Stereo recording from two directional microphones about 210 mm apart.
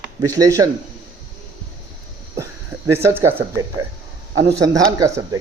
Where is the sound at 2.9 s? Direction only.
10° right (ahead or behind).